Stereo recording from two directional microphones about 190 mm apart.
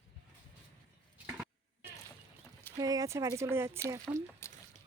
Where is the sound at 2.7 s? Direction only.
20° right (ahead or behind).